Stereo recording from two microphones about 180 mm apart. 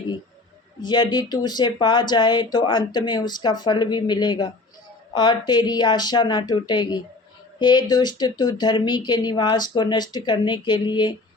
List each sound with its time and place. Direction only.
0.8 s speech: 25° left (ahead or behind)